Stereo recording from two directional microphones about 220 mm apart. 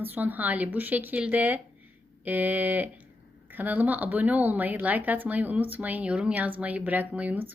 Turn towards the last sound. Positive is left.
turn(degrees=-5)  # may be behind; listen again after turning